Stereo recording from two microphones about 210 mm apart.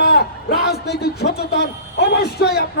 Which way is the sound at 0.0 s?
45° left (ahead or behind).